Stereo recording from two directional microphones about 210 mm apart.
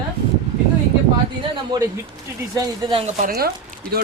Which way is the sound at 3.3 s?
50° right (ahead or behind).